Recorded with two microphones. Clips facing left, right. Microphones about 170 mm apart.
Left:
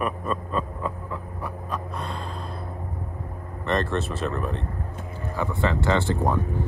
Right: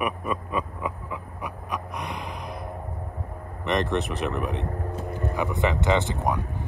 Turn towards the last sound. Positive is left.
turn(degrees=-15)  # may be behind; listen again after turning